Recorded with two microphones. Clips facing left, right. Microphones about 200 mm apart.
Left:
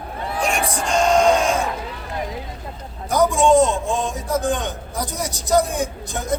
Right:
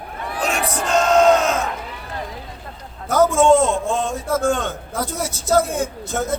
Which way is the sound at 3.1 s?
15° left (ahead or behind).